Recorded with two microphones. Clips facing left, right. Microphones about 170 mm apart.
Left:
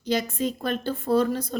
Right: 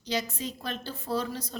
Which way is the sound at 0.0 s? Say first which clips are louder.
Left 7 dB; 50° left (ahead or behind).